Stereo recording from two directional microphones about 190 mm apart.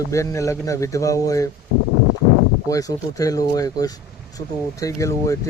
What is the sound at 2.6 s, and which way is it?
Speech, 20° left (ahead or behind).